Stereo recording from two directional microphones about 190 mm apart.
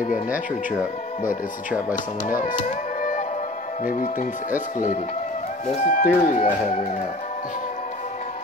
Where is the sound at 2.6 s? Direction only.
40° left (ahead or behind).